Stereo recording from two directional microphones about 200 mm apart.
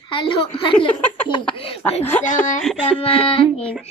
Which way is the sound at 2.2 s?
40° left (ahead or behind).